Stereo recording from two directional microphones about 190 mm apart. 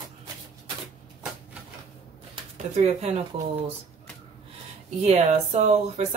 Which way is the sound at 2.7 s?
35° right (ahead or behind).